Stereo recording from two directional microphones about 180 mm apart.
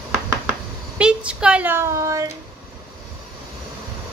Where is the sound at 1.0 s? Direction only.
5° right (ahead or behind).